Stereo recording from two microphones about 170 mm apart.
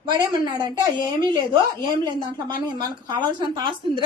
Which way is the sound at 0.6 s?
25° right (ahead or behind).